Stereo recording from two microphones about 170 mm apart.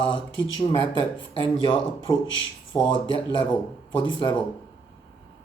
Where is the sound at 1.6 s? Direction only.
30° left (ahead or behind).